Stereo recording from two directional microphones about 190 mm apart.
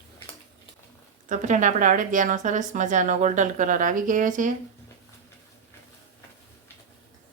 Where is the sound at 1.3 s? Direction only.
40° right (ahead or behind).